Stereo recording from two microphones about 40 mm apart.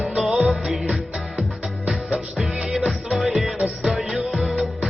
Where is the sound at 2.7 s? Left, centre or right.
Centre.